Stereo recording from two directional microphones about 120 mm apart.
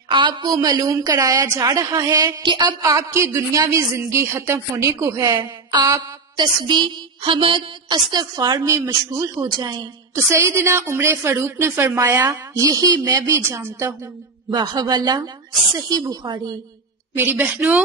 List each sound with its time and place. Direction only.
0.1 s a woman's voice: 40° right (ahead or behind)
2.8 s a woman's voice: 25° right (ahead or behind)
6.4 s a woman's voice: 40° right (ahead or behind)
10.1 s a woman's voice: 25° right (ahead or behind)
12.3 s a woman's voice: 30° right (ahead or behind)
14.5 s a woman's voice: 35° right (ahead or behind)
17.1 s a woman's voice: 15° right (ahead or behind)